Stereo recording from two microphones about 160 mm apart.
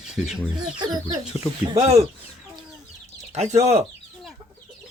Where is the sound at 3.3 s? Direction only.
45° right (ahead or behind).